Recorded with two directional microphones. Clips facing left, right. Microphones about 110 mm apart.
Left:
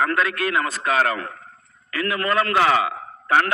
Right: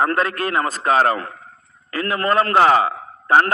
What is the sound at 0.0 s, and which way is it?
A man's voice, 40° right (ahead or behind).